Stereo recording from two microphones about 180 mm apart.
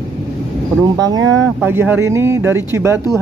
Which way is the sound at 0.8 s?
20° right (ahead or behind).